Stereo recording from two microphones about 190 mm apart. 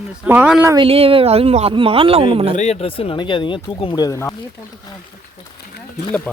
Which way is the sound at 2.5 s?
35° left (ahead or behind).